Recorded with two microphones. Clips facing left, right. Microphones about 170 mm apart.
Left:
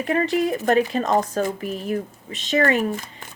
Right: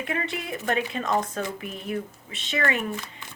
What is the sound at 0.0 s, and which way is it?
Speech, 35° left (ahead or behind).